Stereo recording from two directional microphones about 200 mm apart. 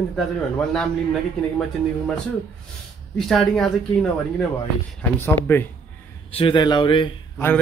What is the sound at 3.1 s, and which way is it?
A man's voice, centre (ahead or behind).